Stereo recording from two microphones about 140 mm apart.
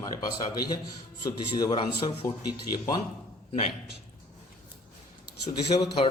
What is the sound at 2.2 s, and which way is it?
Speech, 30° left (ahead or behind).